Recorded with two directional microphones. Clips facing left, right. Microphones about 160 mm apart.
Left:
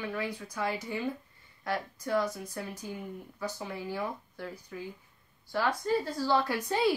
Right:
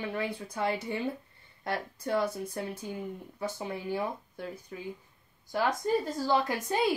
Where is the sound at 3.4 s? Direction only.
25° right (ahead or behind).